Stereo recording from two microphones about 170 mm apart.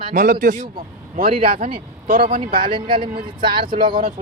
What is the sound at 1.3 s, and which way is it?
Speech, 30° right (ahead or behind).